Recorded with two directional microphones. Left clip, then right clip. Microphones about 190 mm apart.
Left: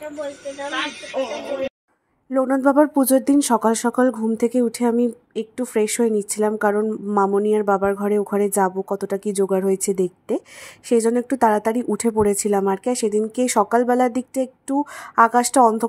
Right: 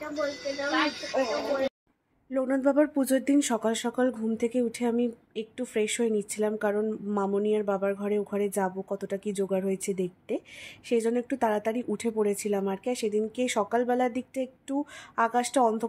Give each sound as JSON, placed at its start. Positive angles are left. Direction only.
{"t": 2.3, "sound": "speech", "side_deg": 20}
{"t": 7.2, "sound": "speech", "side_deg": 30}